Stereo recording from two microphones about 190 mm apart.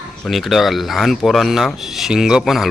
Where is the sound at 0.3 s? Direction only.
Centre (ahead or behind).